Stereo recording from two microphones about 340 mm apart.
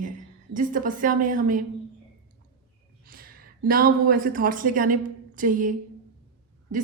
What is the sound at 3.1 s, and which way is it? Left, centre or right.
Speech, right.